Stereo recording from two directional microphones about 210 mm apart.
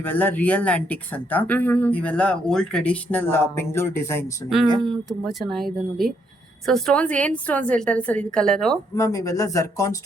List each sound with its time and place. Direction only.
0.0 s speech: 10° left (ahead or behind)
5.5 s a woman's voice: centre (ahead or behind)
9.0 s speech: 15° left (ahead or behind)